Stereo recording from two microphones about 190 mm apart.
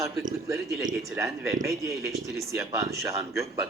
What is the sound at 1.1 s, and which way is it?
Speech, 15° right (ahead or behind).